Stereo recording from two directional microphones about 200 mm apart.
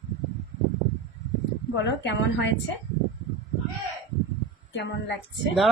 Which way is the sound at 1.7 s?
65° left (ahead or behind).